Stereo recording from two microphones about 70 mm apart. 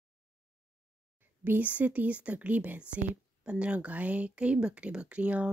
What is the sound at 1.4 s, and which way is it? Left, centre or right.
Speech, right.